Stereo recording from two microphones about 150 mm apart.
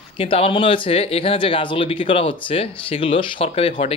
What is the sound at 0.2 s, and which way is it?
Speech, 40° left (ahead or behind).